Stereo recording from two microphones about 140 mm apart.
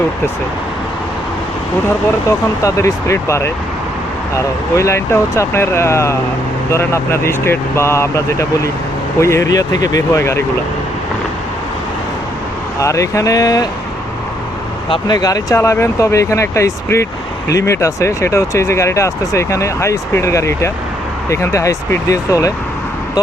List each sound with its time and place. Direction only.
2.6 s speech: 20° left (ahead or behind)
12.8 s speech: 20° left (ahead or behind)
14.8 s speech: 35° left (ahead or behind)